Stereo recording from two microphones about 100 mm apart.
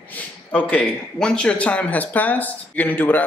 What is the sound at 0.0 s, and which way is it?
Speech, 15° left (ahead or behind).